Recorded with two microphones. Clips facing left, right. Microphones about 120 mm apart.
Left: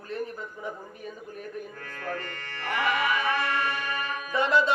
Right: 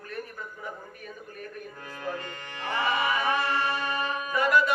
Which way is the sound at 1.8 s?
15° right (ahead or behind).